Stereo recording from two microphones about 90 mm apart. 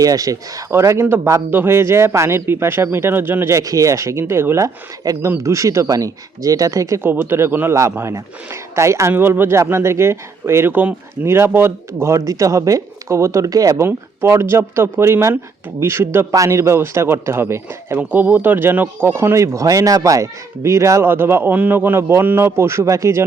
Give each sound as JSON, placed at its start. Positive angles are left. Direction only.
{"t": 0.0, "sound": "speech", "side_deg": -40}
{"t": 3.6, "sound": "speech", "side_deg": -40}
{"t": 7.1, "sound": "speech", "side_deg": -25}
{"t": 13.8, "sound": "speech", "side_deg": -25}